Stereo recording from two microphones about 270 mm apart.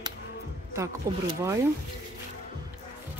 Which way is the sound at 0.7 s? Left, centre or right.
Centre.